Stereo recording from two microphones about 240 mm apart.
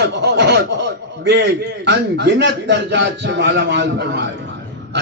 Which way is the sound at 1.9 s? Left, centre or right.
Right.